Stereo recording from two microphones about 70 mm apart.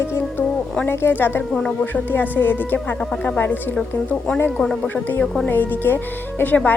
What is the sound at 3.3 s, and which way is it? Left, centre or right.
Speech, left.